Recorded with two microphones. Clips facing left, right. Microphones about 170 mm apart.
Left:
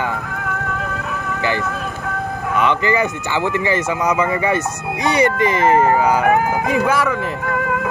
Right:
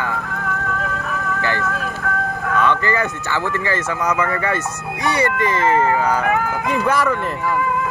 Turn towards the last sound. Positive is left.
turn(degrees=0)  # may be behind; listen again after turning